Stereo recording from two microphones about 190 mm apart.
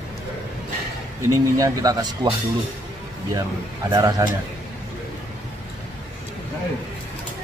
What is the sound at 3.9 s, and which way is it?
Speech, 20° right (ahead or behind).